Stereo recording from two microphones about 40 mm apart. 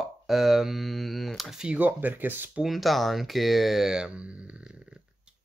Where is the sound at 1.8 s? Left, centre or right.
Right.